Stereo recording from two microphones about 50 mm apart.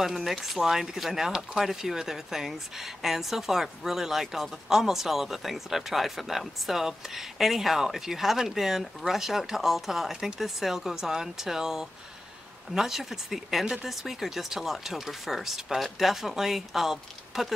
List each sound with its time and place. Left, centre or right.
0.0 s speech: centre